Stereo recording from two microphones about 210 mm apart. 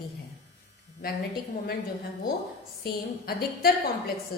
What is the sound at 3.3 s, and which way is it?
Speech, 45° left (ahead or behind).